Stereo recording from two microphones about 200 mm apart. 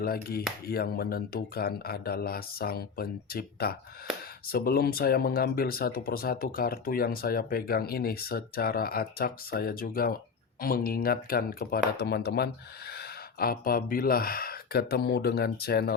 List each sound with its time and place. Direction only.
0.0 s speech: 50° left (ahead or behind)